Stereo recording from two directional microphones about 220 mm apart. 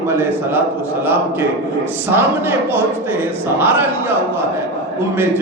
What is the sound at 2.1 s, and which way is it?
Speech, 10° right (ahead or behind).